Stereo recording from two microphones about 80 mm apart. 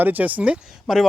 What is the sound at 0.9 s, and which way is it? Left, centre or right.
Speech, centre.